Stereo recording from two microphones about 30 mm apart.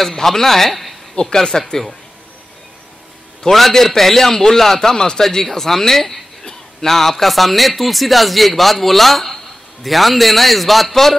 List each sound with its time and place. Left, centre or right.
0.0 s a man's voice: centre
1.2 s speech: centre
3.4 s a man's voice: centre